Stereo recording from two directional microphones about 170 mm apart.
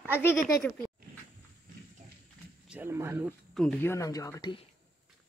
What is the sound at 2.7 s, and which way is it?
Speech, 15° right (ahead or behind).